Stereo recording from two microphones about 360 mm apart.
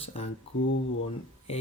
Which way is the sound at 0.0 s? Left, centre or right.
Centre.